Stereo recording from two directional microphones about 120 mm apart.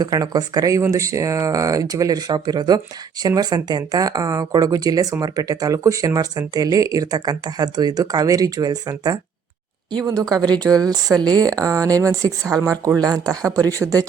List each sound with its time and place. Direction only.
0.0 s speech: 30° right (ahead or behind)